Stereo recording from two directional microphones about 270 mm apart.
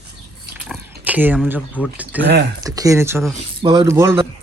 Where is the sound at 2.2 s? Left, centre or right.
Right.